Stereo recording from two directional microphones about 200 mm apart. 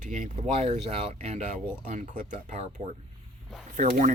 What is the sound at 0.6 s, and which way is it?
Speech, 30° right (ahead or behind).